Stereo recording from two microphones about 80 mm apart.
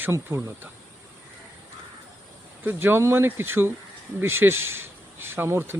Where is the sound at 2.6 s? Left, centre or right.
Right.